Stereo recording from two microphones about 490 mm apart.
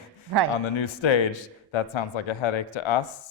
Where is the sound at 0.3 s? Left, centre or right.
Right.